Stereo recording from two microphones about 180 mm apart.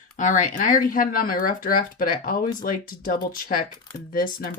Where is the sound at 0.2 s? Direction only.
45° left (ahead or behind).